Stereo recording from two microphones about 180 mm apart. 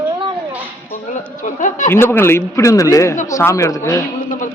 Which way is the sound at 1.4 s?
45° left (ahead or behind).